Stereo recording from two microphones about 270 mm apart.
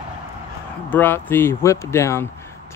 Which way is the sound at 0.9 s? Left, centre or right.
Centre.